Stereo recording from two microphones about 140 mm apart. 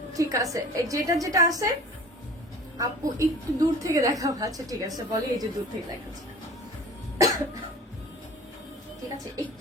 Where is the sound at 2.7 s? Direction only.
25° right (ahead or behind).